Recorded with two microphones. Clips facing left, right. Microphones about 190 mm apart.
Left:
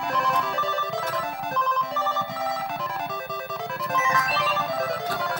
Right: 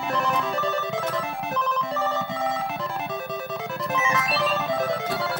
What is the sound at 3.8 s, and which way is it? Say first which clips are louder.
Music: even; centre (ahead or behind).